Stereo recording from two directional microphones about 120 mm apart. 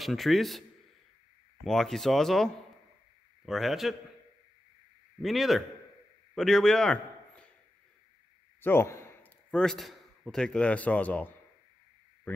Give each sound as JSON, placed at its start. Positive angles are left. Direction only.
{"t": 0.0, "sound": "speech", "side_deg": 0}
{"t": 5.2, "sound": "a man's voice", "side_deg": 0}
{"t": 8.5, "sound": "a sound", "side_deg": 20}
{"t": 9.5, "sound": "a man's voice", "side_deg": 5}